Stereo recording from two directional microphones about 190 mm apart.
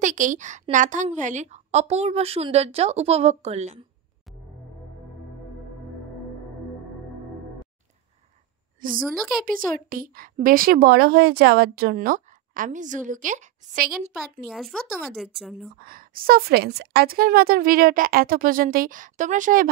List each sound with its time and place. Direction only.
0.0 s a woman's voice: 40° right (ahead or behind)
8.9 s speech: centre (ahead or behind)
9.4 s a woman's voice: 45° right (ahead or behind)
14.5 s speech: centre (ahead or behind)
15.8 s a woman's voice: 50° right (ahead or behind)